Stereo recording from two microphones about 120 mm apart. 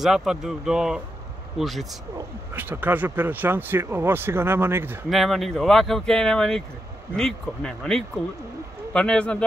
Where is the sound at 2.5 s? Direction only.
15° right (ahead or behind).